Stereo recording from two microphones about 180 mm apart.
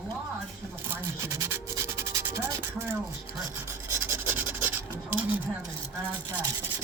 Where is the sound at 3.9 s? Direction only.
10° right (ahead or behind).